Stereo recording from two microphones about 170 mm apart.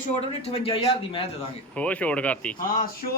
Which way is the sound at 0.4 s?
35° left (ahead or behind).